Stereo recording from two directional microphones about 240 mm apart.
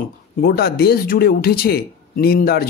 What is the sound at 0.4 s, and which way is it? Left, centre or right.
A man's voice, left.